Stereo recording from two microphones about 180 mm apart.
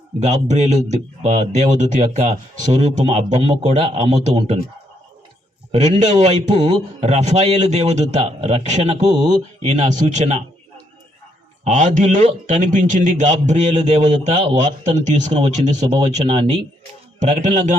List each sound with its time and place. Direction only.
0.2 s a man's voice: 40° right (ahead or behind)
5.7 s a man's voice: 40° right (ahead or behind)
11.6 s a man's voice: 45° right (ahead or behind)